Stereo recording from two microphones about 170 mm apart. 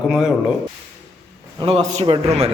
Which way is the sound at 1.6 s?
35° right (ahead or behind).